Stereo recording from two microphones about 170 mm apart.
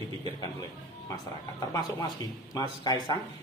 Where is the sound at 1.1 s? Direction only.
20° left (ahead or behind).